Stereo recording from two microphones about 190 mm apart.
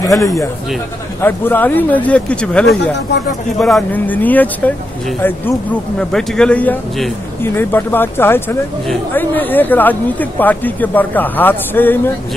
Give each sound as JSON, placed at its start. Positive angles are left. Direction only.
{"t": 0.0, "sound": "speech", "side_deg": 15}
{"t": 5.9, "sound": "speech", "side_deg": 5}